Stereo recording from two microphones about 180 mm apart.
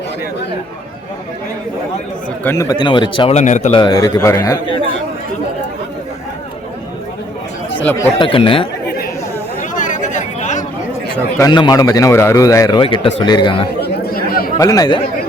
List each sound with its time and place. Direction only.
2.4 s a man's voice: 15° left (ahead or behind); by 3.7 s 40° left (ahead or behind)
3.7 s a man's voice: 25° left (ahead or behind)
7.8 s speech: 10° left (ahead or behind)
8.2 s a man's voice: 30° left (ahead or behind)
9.6 s chatter: 45° left (ahead or behind)
11.3 s a man's voice: 25° left (ahead or behind)
13.8 s chatter: 55° left (ahead or behind)
14.6 s a man's voice: 20° left (ahead or behind)